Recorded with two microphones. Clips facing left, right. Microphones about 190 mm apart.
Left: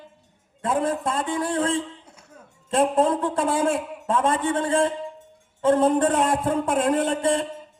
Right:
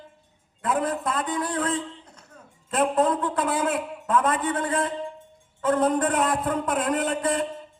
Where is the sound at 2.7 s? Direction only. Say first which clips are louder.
Left 2 dB; 30° left (ahead or behind).